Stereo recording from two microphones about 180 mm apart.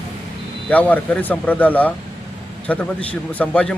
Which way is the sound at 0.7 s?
10° left (ahead or behind).